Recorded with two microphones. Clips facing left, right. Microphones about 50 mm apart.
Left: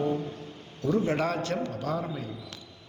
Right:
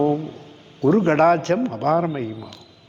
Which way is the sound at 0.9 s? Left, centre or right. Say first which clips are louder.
Right 11 dB; right.